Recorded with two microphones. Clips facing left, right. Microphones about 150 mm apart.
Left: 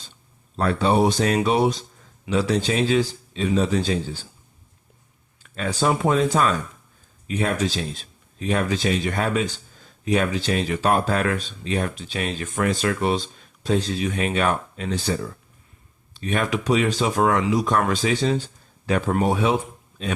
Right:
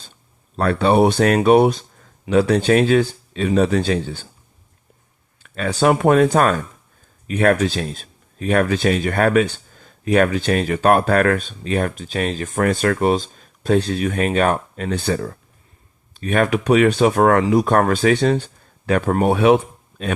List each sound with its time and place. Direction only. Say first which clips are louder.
0.5 s speech: right 4 dB; 60° right (ahead or behind)
5.4 s speech: right 5 dB; 70° right (ahead or behind)